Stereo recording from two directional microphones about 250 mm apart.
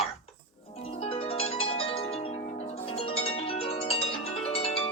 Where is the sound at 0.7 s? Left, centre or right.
Left.